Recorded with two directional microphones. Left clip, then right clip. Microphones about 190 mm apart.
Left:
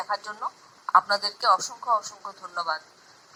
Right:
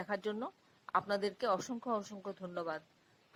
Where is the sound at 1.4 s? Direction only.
30° right (ahead or behind).